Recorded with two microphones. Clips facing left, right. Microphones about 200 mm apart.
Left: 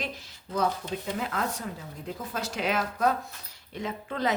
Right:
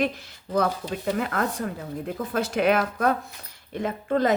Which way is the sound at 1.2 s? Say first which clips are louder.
Right 5 dB; 55° right (ahead or behind).